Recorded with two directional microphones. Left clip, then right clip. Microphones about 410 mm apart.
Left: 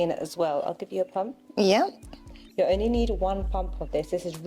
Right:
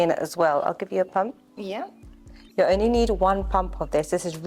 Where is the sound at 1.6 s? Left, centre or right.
Left.